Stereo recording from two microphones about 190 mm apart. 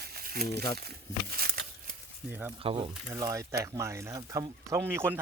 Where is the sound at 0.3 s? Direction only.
55° right (ahead or behind).